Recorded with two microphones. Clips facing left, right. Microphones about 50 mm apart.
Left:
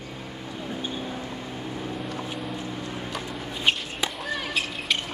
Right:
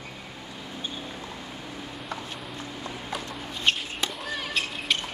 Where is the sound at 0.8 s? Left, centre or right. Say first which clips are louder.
Left 2 dB; left.